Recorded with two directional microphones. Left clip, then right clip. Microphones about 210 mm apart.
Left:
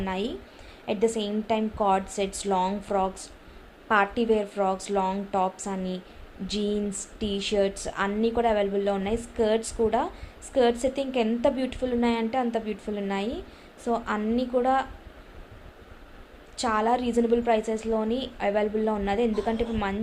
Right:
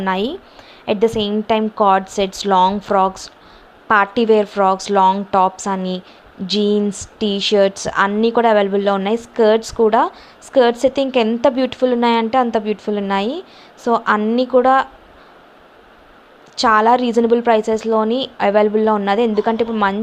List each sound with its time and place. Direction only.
0.0 s speech: 30° right (ahead or behind)
16.6 s speech: 30° right (ahead or behind)